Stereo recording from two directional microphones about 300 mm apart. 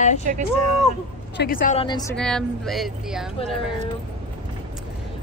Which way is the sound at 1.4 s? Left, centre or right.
Left.